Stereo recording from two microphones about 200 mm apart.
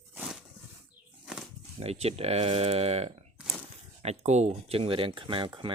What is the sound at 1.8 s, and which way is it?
Speech, 30° right (ahead or behind).